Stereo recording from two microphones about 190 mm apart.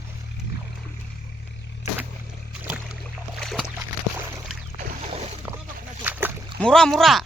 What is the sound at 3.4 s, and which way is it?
Boat, centre (ahead or behind).